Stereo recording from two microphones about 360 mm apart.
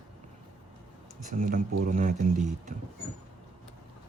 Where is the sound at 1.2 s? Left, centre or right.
Right.